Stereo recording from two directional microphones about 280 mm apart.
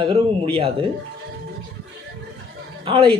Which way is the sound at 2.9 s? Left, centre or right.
Centre.